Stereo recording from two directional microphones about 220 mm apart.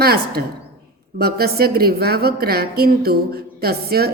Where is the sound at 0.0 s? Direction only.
45° right (ahead or behind).